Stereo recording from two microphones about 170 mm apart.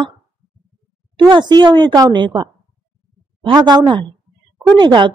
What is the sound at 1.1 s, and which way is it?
A woman's voice, 25° right (ahead or behind).